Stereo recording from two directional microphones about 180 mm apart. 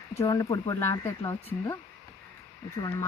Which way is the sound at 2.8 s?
15° left (ahead or behind).